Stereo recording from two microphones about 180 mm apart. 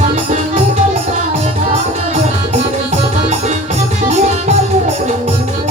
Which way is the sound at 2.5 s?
40° right (ahead or behind).